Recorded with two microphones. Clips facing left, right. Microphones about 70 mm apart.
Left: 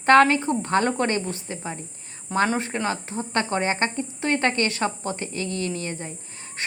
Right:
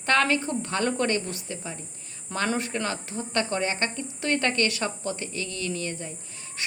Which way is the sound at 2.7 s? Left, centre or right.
Left.